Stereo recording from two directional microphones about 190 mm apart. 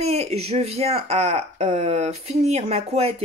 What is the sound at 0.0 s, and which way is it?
Speech, 35° right (ahead or behind).